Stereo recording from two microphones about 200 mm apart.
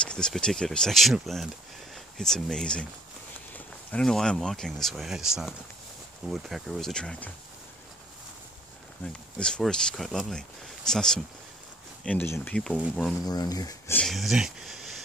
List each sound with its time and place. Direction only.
0.0 s speech: 5° left (ahead or behind)
9.0 s speech: 5° left (ahead or behind)
13.2 s speech: 20° left (ahead or behind)
13.9 s speech: centre (ahead or behind)